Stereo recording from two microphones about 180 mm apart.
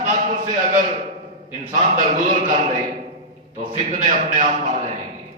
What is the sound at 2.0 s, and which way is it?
Speech, 45° right (ahead or behind).